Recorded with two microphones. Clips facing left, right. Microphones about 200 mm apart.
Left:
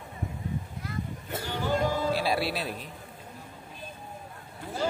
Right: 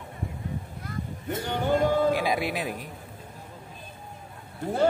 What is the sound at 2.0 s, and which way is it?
Speech, 15° right (ahead or behind).